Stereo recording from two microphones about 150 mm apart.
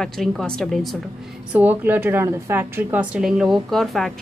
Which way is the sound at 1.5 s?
10° right (ahead or behind).